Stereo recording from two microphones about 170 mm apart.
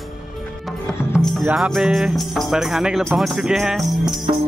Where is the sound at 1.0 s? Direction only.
15° left (ahead or behind).